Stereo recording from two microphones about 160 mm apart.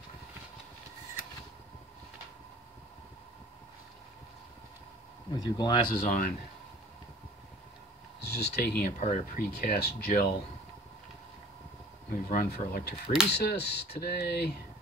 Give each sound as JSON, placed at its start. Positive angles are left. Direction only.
{"t": 5.3, "sound": "speech", "side_deg": 25}
{"t": 5.9, "sound": "speech", "side_deg": 60}
{"t": 8.2, "sound": "speech", "side_deg": 85}
{"t": 9.0, "sound": "speech", "side_deg": 60}
{"t": 12.3, "sound": "speech", "side_deg": 75}